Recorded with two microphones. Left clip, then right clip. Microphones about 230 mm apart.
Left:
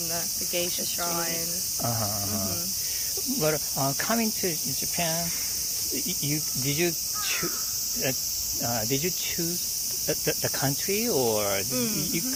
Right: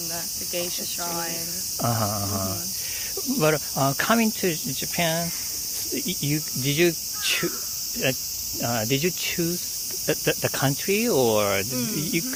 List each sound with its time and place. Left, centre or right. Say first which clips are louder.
3.4 s cricket: right 5 dB; right
6.3 s cricket: right 5 dB; right
8.7 s cricket: right 5 dB; right